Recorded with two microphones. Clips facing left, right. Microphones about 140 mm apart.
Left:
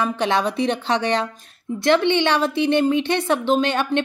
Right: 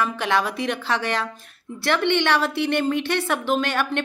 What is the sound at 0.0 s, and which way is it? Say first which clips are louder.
A woman's voice: left 2 dB; 20° left (ahead or behind).